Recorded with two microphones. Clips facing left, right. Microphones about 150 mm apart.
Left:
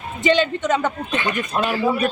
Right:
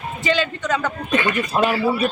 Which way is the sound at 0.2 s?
20° left (ahead or behind).